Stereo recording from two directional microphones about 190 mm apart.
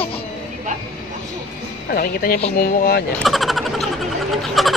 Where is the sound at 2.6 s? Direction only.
55° left (ahead or behind).